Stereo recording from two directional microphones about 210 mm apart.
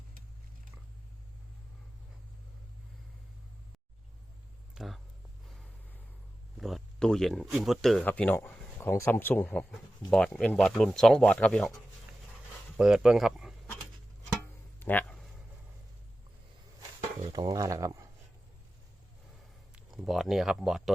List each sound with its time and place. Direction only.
4.7 s a sound: centre (ahead or behind)
6.6 s speech: centre (ahead or behind)
12.7 s speech: 5° right (ahead or behind)
14.8 s a sound: 10° left (ahead or behind)
17.3 s speech: 15° right (ahead or behind)
19.7 s speech: centre (ahead or behind)